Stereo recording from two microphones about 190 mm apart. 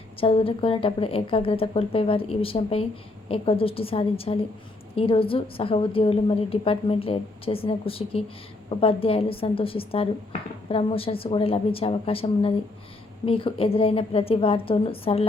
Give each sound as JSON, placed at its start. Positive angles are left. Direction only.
{"t": 0.2, "sound": "a woman's voice", "side_deg": 30}